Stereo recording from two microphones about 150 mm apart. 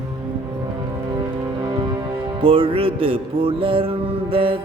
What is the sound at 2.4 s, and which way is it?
Mantra, 35° right (ahead or behind).